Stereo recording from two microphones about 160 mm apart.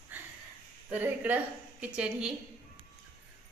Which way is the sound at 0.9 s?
10° right (ahead or behind).